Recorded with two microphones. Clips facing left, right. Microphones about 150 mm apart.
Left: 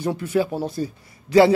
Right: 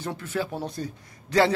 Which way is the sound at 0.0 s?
10° left (ahead or behind).